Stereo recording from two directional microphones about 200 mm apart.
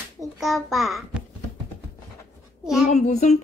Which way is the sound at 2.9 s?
35° left (ahead or behind).